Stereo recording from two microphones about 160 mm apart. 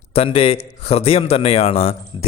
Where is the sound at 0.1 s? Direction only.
35° left (ahead or behind).